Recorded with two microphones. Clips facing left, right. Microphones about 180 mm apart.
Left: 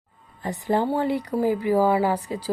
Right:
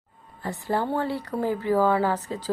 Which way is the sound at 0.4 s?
20° left (ahead or behind).